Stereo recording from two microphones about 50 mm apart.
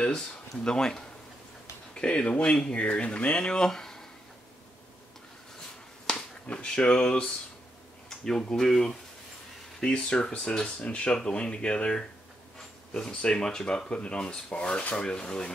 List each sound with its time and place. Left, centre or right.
0.7 s speech: centre
6.1 s finger snapping: centre
6.4 s speech: left
8.3 s speech: centre